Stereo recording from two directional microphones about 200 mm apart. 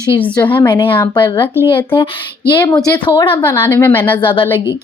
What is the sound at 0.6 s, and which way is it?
Speech, 25° left (ahead or behind).